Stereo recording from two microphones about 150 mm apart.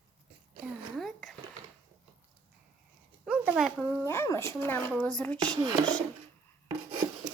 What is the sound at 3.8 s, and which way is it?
Speech, 15° left (ahead or behind).